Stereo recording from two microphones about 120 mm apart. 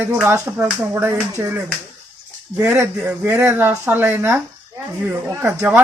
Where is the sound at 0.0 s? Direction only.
15° right (ahead or behind).